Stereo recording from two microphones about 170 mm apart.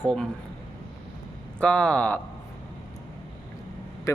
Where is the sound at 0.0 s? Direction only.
5° left (ahead or behind).